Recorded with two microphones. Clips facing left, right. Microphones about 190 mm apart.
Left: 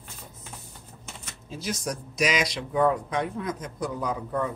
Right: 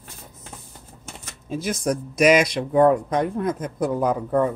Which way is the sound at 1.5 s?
55° right (ahead or behind).